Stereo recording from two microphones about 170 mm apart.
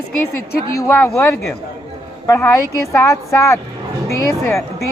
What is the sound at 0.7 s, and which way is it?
Speech, 15° left (ahead or behind).